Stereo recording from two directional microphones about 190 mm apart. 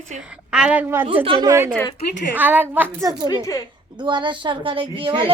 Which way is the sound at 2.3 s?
10° right (ahead or behind).